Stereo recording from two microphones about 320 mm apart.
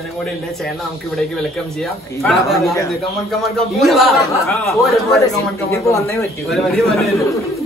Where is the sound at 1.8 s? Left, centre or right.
Centre.